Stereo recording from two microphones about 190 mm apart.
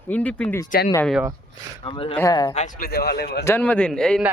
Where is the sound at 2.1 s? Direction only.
20° left (ahead or behind).